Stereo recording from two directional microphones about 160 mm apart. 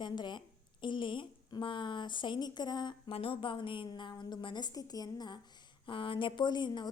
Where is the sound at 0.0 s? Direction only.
30° left (ahead or behind).